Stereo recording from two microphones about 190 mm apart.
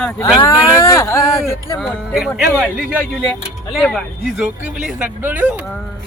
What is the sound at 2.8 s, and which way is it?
Speech, 5° left (ahead or behind).